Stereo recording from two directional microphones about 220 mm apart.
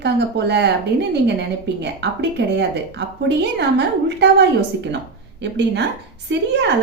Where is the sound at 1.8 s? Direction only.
50° right (ahead or behind).